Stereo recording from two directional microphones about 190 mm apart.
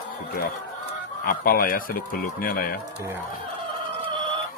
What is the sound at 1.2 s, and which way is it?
Speech, 50° left (ahead or behind).